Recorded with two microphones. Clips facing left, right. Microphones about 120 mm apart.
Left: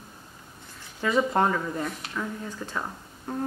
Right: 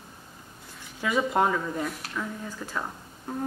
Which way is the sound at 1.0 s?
5° right (ahead or behind).